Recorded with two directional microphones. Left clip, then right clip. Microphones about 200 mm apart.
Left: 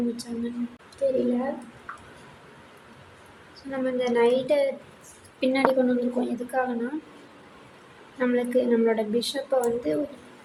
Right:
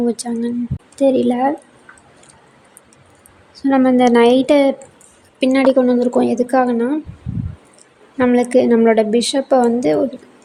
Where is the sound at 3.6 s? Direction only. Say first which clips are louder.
Right 14 dB; 50° right (ahead or behind).